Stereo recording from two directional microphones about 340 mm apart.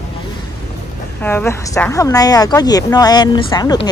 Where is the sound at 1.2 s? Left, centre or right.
Centre.